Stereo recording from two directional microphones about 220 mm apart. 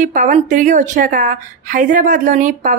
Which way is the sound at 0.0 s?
35° right (ahead or behind).